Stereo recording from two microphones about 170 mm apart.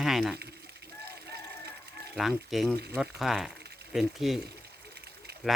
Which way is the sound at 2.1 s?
Centre (ahead or behind).